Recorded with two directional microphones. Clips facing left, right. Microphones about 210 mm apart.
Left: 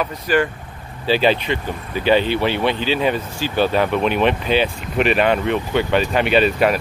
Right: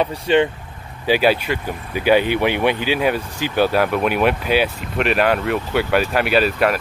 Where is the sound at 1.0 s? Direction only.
10° right (ahead or behind).